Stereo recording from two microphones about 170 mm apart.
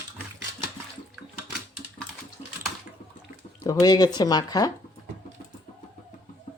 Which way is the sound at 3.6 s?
25° left (ahead or behind).